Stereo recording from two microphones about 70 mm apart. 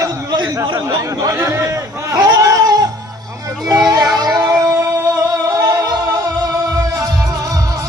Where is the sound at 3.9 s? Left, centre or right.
Right.